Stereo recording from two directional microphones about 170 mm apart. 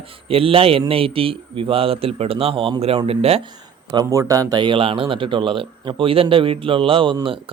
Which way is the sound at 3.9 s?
20° right (ahead or behind).